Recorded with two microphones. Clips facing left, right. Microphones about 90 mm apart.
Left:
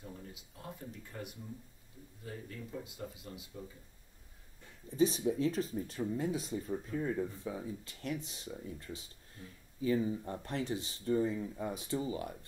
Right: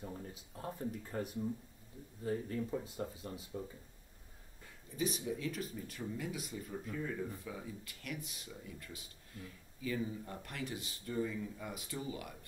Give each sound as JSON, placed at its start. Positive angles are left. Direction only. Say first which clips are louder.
{"t": 0.0, "sound": "speech", "louder": "right 2 dB", "side_deg": -30}
{"t": 4.9, "sound": "speech", "louder": "left 8 dB", "side_deg": 30}